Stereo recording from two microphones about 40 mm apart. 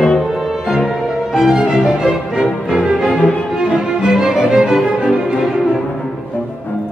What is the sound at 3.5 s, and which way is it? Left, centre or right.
Music, centre.